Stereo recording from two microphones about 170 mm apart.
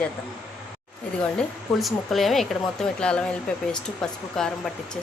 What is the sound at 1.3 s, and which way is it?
Speech, centre (ahead or behind).